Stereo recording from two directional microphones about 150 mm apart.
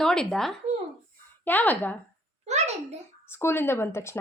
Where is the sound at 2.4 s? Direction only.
45° right (ahead or behind).